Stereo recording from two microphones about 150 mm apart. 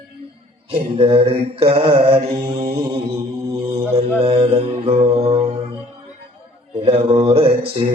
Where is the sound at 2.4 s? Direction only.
90° right.